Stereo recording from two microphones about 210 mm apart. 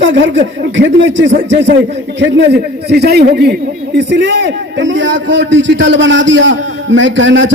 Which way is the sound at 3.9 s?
60° right (ahead or behind).